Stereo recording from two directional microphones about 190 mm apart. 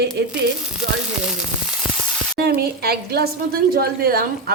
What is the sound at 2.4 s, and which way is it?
A woman's voice, 55° right (ahead or behind).